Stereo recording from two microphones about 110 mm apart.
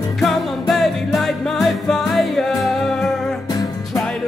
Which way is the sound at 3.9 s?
Centre (ahead or behind).